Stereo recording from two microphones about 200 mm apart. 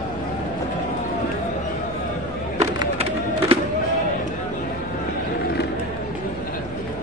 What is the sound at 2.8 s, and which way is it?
Music, 30° right (ahead or behind).